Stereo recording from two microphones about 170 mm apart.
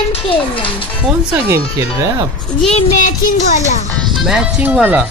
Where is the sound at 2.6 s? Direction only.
45° left (ahead or behind).